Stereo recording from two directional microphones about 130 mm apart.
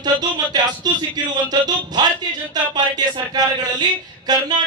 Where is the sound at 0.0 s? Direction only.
35° right (ahead or behind).